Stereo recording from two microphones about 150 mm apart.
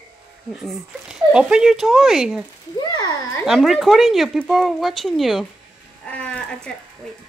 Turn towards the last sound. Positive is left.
turn(degrees=5)  # may be behind; listen again after turning